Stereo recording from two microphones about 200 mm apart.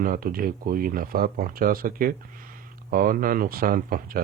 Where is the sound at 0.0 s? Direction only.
45° right (ahead or behind).